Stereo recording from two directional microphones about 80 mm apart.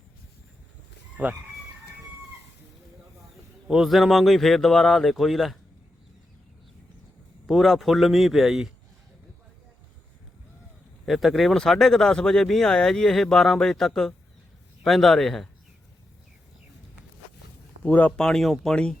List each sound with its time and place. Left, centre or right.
1.1 s speech: centre
3.7 s speech: centre
7.4 s speech: centre
11.0 s speech: centre
17.8 s speech: left
18.2 s speech: centre